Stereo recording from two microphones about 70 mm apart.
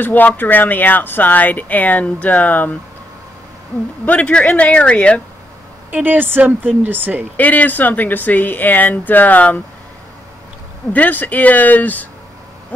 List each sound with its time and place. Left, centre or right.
0.0 s speech: left
4.0 s speech: left
5.9 s a woman's voice: right
7.3 s speech: left
10.9 s speech: left